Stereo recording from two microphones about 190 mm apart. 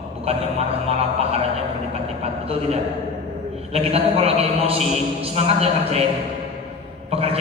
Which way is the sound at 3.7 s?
30° right (ahead or behind).